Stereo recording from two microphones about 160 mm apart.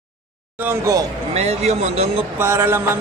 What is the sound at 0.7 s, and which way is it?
Speech, 20° right (ahead or behind).